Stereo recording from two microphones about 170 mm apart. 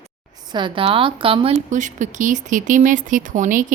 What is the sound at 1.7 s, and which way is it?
A woman's voice, 45° right (ahead or behind).